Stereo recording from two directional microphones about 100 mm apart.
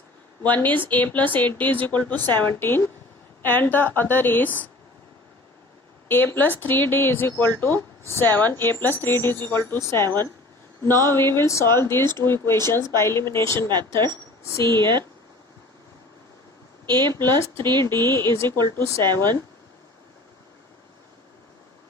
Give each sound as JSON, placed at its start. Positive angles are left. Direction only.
{"t": 0.4, "sound": "a woman's voice", "side_deg": 15}
{"t": 6.1, "sound": "speech", "side_deg": 20}
{"t": 13.7, "sound": "speech", "side_deg": -45}
{"t": 14.0, "sound": "speech", "side_deg": 30}
{"t": 14.6, "sound": "speech", "side_deg": -50}
{"t": 17.8, "sound": "speech", "side_deg": 20}
{"t": 19.0, "sound": "speech", "side_deg": -45}